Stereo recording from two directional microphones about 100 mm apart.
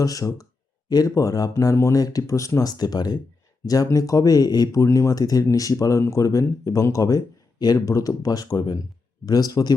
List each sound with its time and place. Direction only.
0.0 s speech: 35° left (ahead or behind)